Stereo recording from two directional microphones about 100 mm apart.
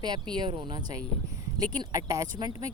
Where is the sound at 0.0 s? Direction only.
45° right (ahead or behind).